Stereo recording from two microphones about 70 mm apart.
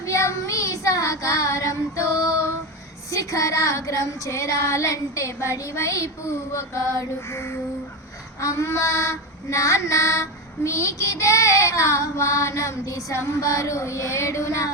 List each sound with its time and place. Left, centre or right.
0.0 s child singing: left
3.1 s female singing: left